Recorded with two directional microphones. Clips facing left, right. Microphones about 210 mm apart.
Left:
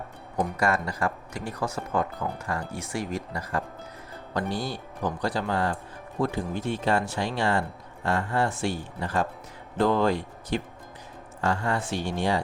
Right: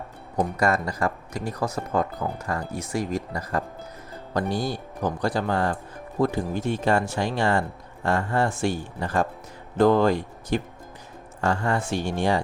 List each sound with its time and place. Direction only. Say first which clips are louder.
0.3 s speech: right 3 dB; 40° right (ahead or behind)
4.4 s speech: right 4 dB; 45° right (ahead or behind)